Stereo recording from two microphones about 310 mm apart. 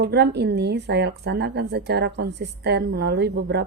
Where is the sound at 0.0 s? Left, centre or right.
Right.